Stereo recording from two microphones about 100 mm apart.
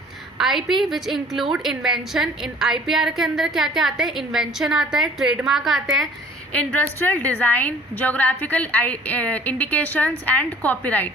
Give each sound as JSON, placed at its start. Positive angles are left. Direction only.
{"t": 0.3, "sound": "a woman's voice", "side_deg": 0}
{"t": 6.5, "sound": "a woman's voice", "side_deg": 10}